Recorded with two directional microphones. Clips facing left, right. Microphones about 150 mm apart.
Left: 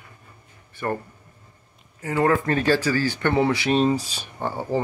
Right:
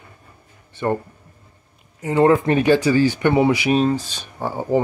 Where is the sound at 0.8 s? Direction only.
20° right (ahead or behind).